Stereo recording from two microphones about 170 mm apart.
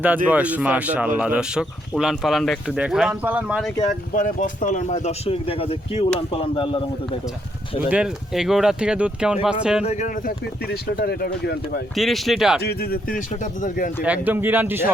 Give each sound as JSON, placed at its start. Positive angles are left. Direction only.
{"t": 0.3, "sound": "speech", "side_deg": -10}
{"t": 3.8, "sound": "speech", "side_deg": 50}
{"t": 7.9, "sound": "speech", "side_deg": -5}
{"t": 9.8, "sound": "speech", "side_deg": 45}
{"t": 10.4, "sound": "speech", "side_deg": 70}
{"t": 11.9, "sound": "speech", "side_deg": 0}
{"t": 12.6, "sound": "speech", "side_deg": 65}
{"t": 14.0, "sound": "speech", "side_deg": -10}